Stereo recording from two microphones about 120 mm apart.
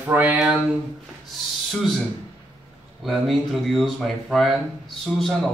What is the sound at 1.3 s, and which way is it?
Speech, centre (ahead or behind).